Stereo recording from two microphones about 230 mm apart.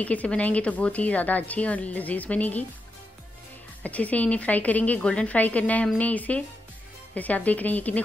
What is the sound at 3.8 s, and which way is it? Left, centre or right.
Speech, centre.